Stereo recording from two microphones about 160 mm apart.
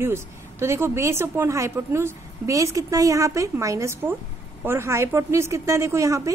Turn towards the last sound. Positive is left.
turn(degrees=-20)  # may be behind; listen again after turning